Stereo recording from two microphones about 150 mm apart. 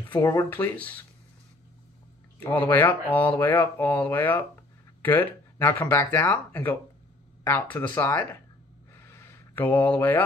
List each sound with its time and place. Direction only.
0.1 s speech: 20° left (ahead or behind)
2.6 s speech: 10° left (ahead or behind)
9.6 s speech: 10° left (ahead or behind)